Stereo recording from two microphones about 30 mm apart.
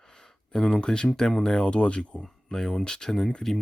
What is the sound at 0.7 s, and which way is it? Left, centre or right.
Speech, left.